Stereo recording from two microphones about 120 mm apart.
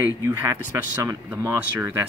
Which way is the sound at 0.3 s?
25° right (ahead or behind).